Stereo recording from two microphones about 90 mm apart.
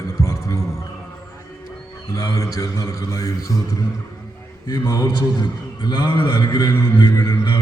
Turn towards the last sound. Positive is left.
turn(degrees=40)  # may be behind; listen again after turning